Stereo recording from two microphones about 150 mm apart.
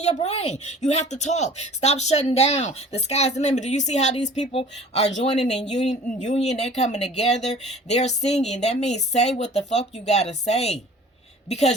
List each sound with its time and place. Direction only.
0.0 s speech: 45° left (ahead or behind)